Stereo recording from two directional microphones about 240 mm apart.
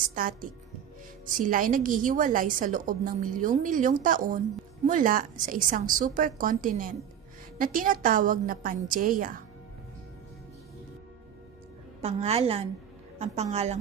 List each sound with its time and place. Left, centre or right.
0.1 s a woman's voice: right
12.0 s a woman's voice: right